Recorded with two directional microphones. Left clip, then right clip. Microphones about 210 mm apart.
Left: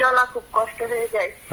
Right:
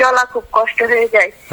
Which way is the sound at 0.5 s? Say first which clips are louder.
Right 10 dB; 40° right (ahead or behind).